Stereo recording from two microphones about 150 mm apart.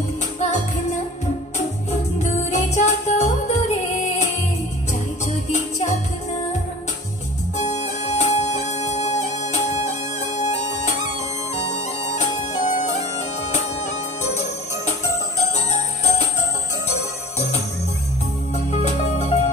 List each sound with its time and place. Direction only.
0.4 s music: 50° left (ahead or behind)
7.5 s music: 50° left (ahead or behind)
11.7 s bagpipes: 50° left (ahead or behind)
13.4 s music: 50° left (ahead or behind)
14.9 s jingle bell: 50° left (ahead or behind)
18.5 s music: 50° left (ahead or behind)